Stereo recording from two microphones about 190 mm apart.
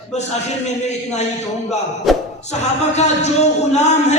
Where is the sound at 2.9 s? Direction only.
35° left (ahead or behind).